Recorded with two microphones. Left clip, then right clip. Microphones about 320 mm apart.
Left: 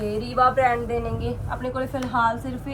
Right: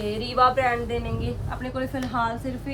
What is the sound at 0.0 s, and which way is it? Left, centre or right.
Speech, centre.